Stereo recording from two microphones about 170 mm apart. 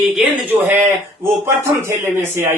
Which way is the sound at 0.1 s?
10° right (ahead or behind).